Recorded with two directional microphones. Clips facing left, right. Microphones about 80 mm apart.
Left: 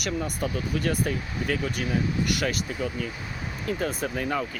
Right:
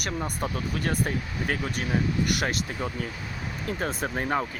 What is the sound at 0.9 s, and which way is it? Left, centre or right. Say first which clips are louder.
Speech: left 1 dB; right.